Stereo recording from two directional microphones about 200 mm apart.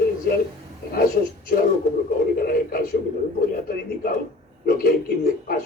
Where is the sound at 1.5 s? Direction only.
50° left (ahead or behind).